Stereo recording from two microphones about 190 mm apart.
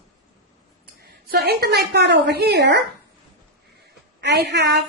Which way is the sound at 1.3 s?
55° right (ahead or behind).